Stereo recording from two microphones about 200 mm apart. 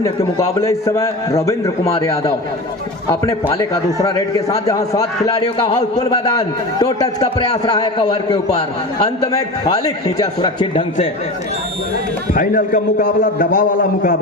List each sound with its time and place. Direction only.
0.0 s a man's voice: 15° left (ahead or behind)
3.9 s a man's voice: 15° left (ahead or behind)
9.2 s a man's voice: 15° left (ahead or behind)
12.3 s a man's voice: 45° left (ahead or behind)